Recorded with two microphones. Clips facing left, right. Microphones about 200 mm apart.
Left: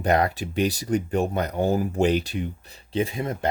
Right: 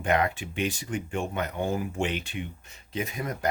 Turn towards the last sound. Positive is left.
turn(degrees=25)  # may be behind; listen again after turning